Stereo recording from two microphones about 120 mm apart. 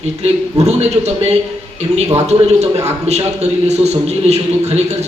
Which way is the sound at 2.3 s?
65° right (ahead or behind).